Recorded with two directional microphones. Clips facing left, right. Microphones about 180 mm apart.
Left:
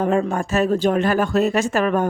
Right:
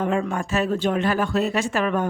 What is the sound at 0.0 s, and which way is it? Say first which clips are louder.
Speech: left 4 dB; 40° left (ahead or behind).